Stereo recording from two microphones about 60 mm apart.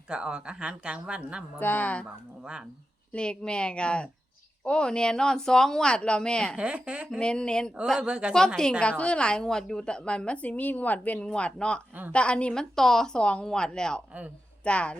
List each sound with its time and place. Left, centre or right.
0.1 s speech: centre
1.5 s speech: left
3.1 s a woman's voice: centre
6.6 s speech: centre
7.2 s a woman's voice: centre
8.0 s a woman's voice: centre
8.8 s a woman's voice: centre